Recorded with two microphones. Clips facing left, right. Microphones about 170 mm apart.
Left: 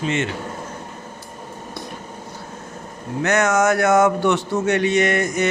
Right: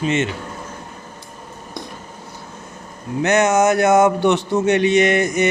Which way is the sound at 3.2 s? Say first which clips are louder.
Right 3 dB; 20° right (ahead or behind).